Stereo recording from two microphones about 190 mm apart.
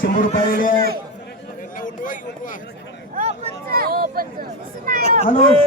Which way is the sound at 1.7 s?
45° left (ahead or behind).